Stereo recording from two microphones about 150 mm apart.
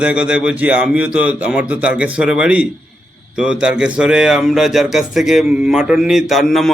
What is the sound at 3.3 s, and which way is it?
Speech, 5° right (ahead or behind).